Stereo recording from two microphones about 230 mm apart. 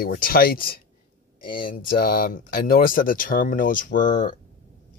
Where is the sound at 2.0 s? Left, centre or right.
Left.